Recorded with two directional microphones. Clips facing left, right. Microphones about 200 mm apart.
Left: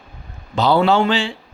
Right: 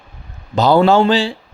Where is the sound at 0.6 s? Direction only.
45° right (ahead or behind).